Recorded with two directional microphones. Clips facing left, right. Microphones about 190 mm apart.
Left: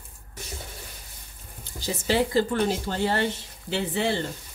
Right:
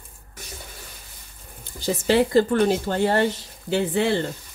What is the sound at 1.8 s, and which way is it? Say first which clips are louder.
Speech: right 5 dB; 60° right (ahead or behind).